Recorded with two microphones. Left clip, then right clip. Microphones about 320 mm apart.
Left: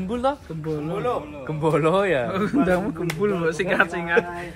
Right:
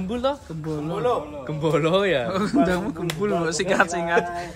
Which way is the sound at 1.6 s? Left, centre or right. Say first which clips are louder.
Left 1 dB; left.